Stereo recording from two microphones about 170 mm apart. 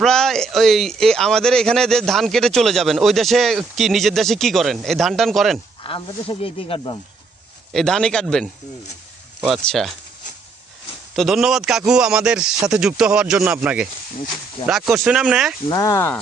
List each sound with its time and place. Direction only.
0.0 s a man's voice: centre (ahead or behind)
5.8 s speech: 30° left (ahead or behind)
7.7 s a man's voice: 5° left (ahead or behind)
11.1 s a man's voice: centre (ahead or behind)
15.7 s speech: 20° left (ahead or behind)